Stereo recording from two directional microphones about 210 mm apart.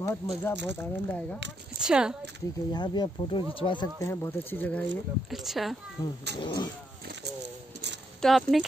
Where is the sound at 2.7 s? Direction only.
20° left (ahead or behind); by 5.7 s centre (ahead or behind).